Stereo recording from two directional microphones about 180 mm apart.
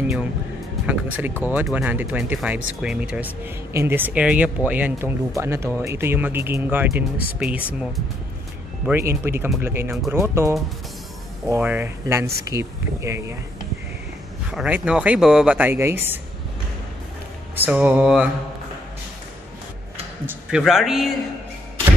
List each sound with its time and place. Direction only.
0.8 s a man's voice: 10° right (ahead or behind)
14.5 s speech: 5° right (ahead or behind)
17.6 s speech: 10° right (ahead or behind)
20.2 s a man's voice: 5° right (ahead or behind)